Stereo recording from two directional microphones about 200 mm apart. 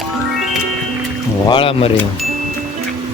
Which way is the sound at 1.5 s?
25° left (ahead or behind).